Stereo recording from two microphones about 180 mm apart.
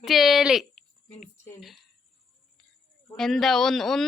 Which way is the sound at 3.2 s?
Centre (ahead or behind).